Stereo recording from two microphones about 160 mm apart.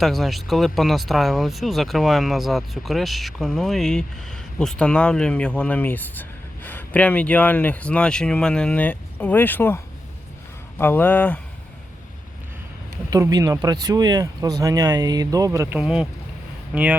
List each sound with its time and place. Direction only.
0.0 s speech: centre (ahead or behind)
13.1 s speech: 20° right (ahead or behind)
15.8 s speech: 5° right (ahead or behind)